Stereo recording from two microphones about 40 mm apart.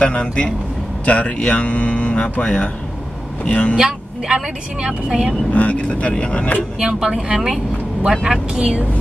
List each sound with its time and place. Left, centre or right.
0.0 s a man's voice: left
3.7 s speech: centre
5.5 s speech: left
6.8 s speech: centre
8.3 s speech: centre